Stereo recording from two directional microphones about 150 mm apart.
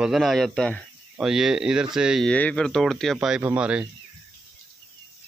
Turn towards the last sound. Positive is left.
turn(degrees=-5)  # may be behind; listen again after turning